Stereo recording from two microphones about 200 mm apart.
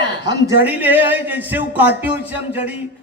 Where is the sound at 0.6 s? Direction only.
10° right (ahead or behind).